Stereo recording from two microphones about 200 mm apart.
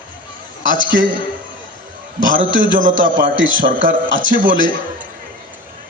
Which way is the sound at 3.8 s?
70° right (ahead or behind).